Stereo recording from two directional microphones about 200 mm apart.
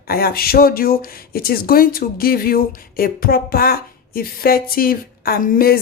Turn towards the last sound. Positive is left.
turn(degrees=45)  # may be behind; listen again after turning